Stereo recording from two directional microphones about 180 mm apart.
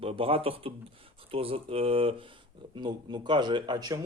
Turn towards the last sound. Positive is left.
turn(degrees=-25)  # may be behind; listen again after turning